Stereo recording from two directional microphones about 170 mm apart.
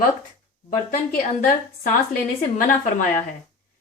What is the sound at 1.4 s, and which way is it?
Speech, 50° left (ahead or behind).